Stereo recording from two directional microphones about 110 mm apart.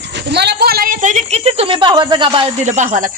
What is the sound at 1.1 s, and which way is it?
Speech, 75° right (ahead or behind).